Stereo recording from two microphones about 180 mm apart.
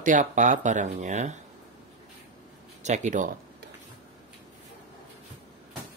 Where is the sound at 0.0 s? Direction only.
45° right (ahead or behind).